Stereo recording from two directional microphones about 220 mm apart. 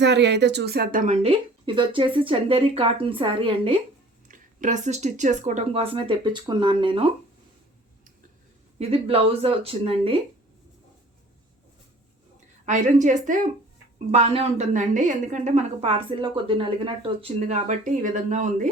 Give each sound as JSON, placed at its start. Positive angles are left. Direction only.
{"t": 0.0, "sound": "a woman's voice", "side_deg": -50}
{"t": 4.3, "sound": "a woman's voice", "side_deg": -35}
{"t": 8.8, "sound": "a woman's voice", "side_deg": -25}
{"t": 12.6, "sound": "a woman's voice", "side_deg": -35}